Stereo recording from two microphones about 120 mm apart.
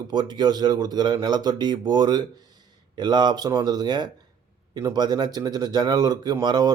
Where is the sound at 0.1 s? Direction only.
35° right (ahead or behind).